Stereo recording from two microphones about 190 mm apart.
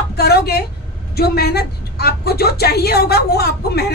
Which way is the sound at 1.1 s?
55° left (ahead or behind).